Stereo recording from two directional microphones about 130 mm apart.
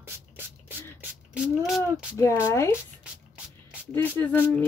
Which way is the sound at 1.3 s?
5° right (ahead or behind).